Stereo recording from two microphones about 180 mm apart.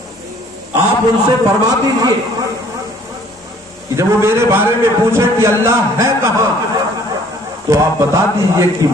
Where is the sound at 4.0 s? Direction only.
15° right (ahead or behind).